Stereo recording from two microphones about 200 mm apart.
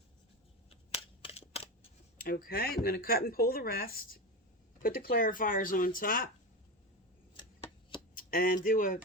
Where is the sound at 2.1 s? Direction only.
45° left (ahead or behind).